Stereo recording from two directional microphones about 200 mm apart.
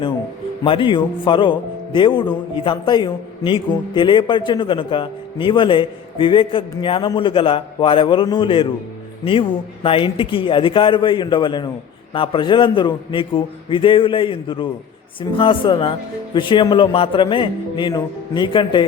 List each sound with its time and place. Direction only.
0.6 s speech: 25° left (ahead or behind)